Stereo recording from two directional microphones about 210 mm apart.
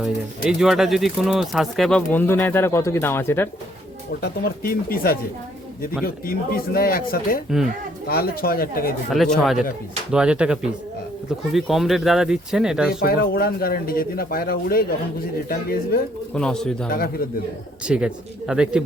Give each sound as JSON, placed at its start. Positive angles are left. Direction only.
{"t": 0.0, "sound": "speech", "side_deg": 0}
{"t": 4.2, "sound": "speech", "side_deg": 45}
{"t": 6.2, "sound": "speech", "side_deg": 45}
{"t": 9.0, "sound": "speech", "side_deg": 0}
{"t": 12.9, "sound": "speech", "side_deg": 45}
{"t": 16.3, "sound": "speech", "side_deg": 5}
{"t": 16.9, "sound": "speech", "side_deg": 45}
{"t": 17.8, "sound": "speech", "side_deg": -5}